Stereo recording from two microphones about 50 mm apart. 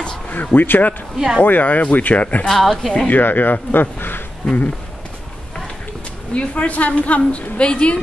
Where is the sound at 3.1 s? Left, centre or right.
Left.